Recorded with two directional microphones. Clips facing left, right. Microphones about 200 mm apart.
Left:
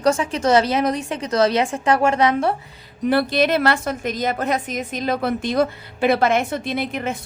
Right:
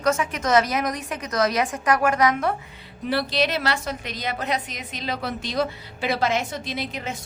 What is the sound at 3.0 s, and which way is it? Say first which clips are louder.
A woman's voice: left 6 dB; 55° left (ahead or behind).